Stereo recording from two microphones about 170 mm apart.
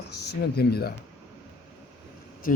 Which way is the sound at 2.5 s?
55° left (ahead or behind).